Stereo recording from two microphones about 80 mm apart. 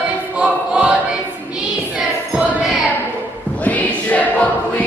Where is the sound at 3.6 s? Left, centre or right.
Centre.